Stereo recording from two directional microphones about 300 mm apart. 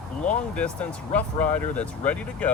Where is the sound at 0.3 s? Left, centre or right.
Centre.